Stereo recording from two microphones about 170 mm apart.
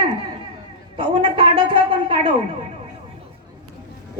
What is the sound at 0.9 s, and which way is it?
A woman's voice, 30° right (ahead or behind).